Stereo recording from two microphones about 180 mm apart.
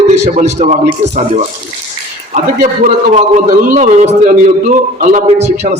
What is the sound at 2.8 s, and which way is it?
A man's voice, 40° right (ahead or behind).